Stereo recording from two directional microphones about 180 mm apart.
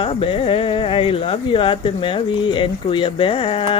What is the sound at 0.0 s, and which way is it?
Speech, 30° left (ahead or behind).